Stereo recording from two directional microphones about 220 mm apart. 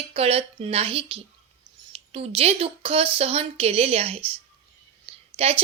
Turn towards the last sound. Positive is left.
turn(degrees=-25)  # may be behind; listen again after turning